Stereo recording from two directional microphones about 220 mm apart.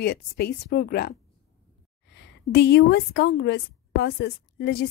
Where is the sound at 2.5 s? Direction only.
50° left (ahead or behind).